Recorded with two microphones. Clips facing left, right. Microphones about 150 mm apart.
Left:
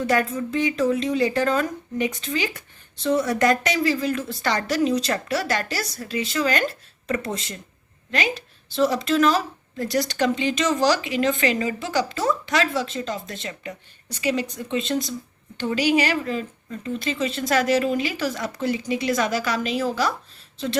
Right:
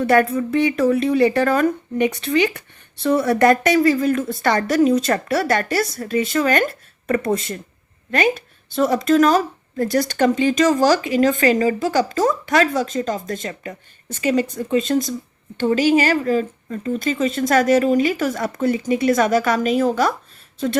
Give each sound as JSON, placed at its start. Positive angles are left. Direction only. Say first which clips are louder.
{"t": 0.0, "sound": "speech", "louder": "right 6 dB", "side_deg": -60}